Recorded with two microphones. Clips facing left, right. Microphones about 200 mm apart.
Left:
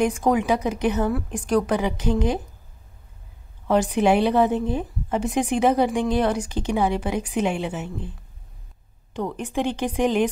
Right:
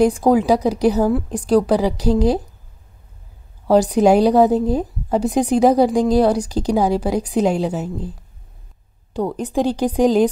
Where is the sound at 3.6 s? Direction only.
35° right (ahead or behind).